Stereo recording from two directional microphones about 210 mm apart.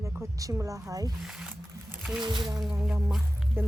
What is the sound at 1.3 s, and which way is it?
Speech, 5° right (ahead or behind).